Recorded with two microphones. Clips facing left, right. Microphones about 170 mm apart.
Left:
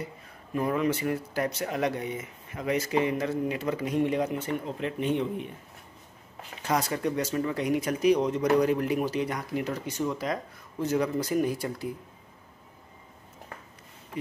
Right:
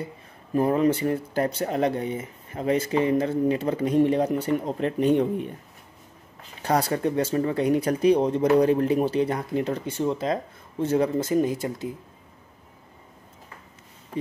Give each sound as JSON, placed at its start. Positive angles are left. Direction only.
{"t": 0.0, "sound": "speech", "side_deg": -35}
{"t": 6.6, "sound": "speech", "side_deg": -35}